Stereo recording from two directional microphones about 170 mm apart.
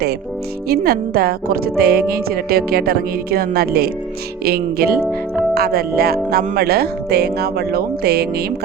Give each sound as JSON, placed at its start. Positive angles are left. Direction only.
{"t": 0.7, "sound": "a woman's voice", "side_deg": -65}